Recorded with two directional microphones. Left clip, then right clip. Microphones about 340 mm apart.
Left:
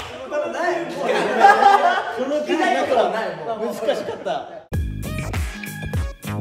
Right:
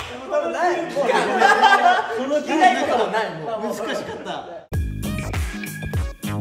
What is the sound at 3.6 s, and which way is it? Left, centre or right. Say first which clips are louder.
Music: left 3 dB; centre.